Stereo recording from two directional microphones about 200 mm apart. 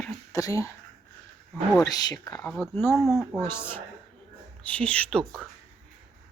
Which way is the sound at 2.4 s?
Centre (ahead or behind).